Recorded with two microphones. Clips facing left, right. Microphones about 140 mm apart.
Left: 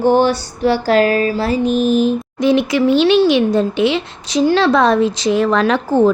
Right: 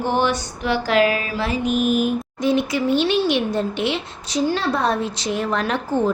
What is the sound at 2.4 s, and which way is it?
Speech, 90° left.